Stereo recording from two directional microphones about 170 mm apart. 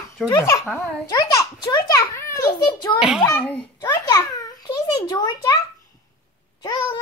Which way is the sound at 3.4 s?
10° left (ahead or behind).